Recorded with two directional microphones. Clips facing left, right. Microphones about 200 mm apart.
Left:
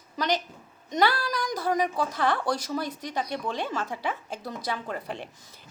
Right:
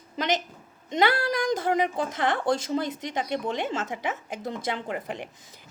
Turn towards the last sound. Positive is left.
turn(degrees=-15)  # may be behind; listen again after turning